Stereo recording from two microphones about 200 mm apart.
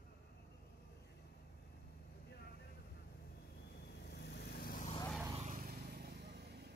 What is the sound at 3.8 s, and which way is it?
Vehicle, 55° left (ahead or behind).